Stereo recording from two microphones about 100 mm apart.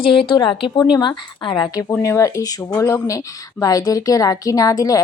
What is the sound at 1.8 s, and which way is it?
Speech, 25° left (ahead or behind).